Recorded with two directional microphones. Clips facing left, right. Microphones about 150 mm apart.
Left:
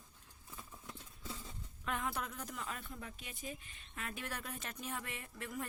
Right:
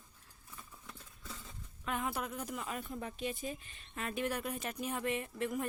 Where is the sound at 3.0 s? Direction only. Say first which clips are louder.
Right 10 dB; 30° right (ahead or behind).